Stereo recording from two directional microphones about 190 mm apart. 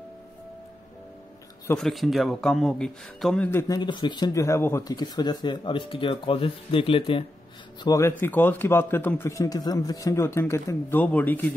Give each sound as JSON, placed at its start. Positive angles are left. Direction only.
{"t": 1.8, "sound": "speech", "side_deg": 0}
{"t": 3.4, "sound": "speech", "side_deg": 15}
{"t": 7.8, "sound": "a man's voice", "side_deg": 15}